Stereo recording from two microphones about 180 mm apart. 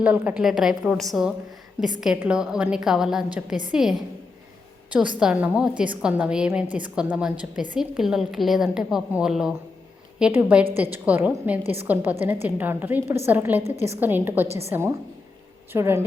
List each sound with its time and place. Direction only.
0.0 s a woman's voice: 10° right (ahead or behind)